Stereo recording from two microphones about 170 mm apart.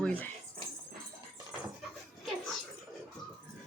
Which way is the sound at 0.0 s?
10° left (ahead or behind).